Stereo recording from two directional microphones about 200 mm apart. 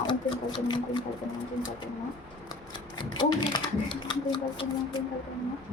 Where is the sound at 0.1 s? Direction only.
25° left (ahead or behind).